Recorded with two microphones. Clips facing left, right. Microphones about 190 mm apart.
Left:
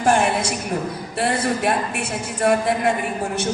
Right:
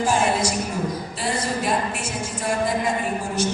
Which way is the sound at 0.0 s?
60° left (ahead or behind).